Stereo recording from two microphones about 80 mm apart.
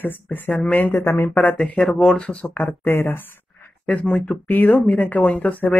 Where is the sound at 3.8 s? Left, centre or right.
Centre.